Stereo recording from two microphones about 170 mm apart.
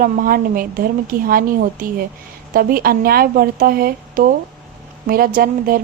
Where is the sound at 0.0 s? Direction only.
55° right (ahead or behind).